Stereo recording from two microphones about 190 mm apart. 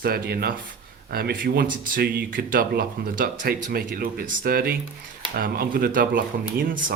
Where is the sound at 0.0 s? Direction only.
55° right (ahead or behind).